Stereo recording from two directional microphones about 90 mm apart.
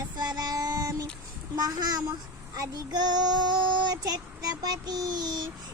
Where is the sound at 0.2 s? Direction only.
50° right (ahead or behind).